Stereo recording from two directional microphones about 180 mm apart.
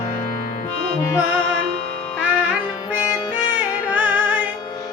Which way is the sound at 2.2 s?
10° right (ahead or behind).